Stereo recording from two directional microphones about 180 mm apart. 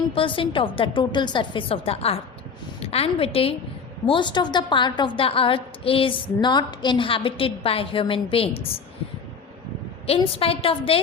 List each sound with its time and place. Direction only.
0.1 s a woman's voice: 30° left (ahead or behind)
10.1 s a woman's voice: 30° left (ahead or behind)